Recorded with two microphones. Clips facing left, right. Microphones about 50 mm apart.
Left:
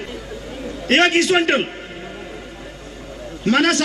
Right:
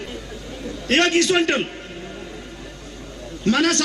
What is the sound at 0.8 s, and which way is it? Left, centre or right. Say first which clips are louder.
Speech: left 2 dB; left.